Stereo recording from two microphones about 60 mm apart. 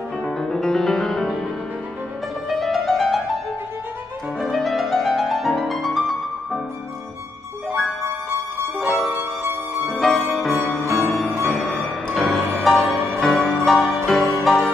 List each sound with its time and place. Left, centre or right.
0.2 s music: centre
2.5 s music: centre
4.4 s music: centre
9.1 s music: right
9.8 s music: centre
13.7 s music: centre